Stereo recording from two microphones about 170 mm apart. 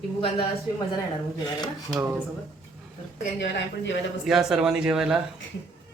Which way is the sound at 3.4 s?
90° left.